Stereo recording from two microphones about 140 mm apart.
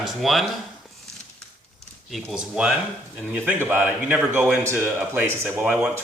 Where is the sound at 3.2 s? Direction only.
15° right (ahead or behind).